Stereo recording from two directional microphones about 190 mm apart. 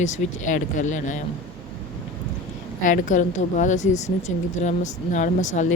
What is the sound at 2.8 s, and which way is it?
A woman's voice, 40° left (ahead or behind).